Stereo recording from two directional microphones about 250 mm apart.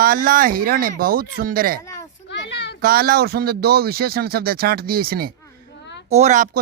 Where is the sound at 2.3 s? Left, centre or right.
Left.